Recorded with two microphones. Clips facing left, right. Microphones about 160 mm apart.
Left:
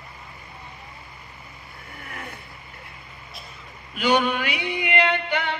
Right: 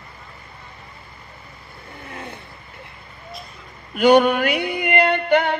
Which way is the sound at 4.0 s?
50° right (ahead or behind).